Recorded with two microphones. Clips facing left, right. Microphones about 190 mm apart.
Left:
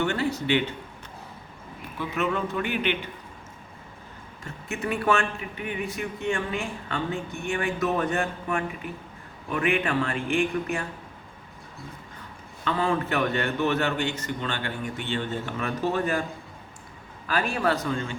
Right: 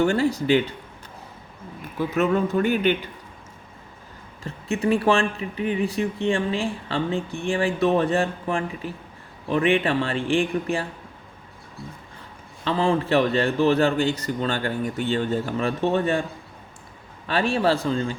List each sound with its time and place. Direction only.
0.0 s a man's voice: 35° right (ahead or behind)
2.0 s a man's voice: 40° right (ahead or behind)
4.4 s a man's voice: 30° right (ahead or behind)
12.6 s a man's voice: 25° right (ahead or behind)
17.2 s speech: 30° right (ahead or behind)